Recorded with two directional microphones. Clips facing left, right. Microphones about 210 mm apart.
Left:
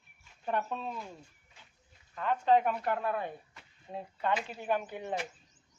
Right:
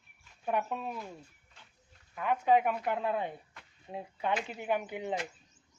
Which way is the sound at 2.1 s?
10° right (ahead or behind).